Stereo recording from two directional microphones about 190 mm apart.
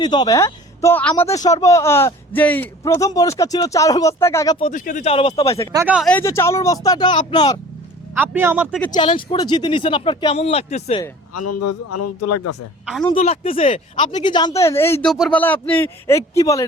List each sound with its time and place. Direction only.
0.0 s speech: 20° left (ahead or behind)
4.6 s speech: 40° left (ahead or behind)
5.7 s a man's voice: 5° right (ahead or behind)
6.1 s speech: 10° left (ahead or behind)
8.1 s a man's voice: 10° right (ahead or behind)
8.9 s speech: 25° left (ahead or behind)
13.1 s speech: 30° left (ahead or behind)
14.1 s speech: 25° left (ahead or behind)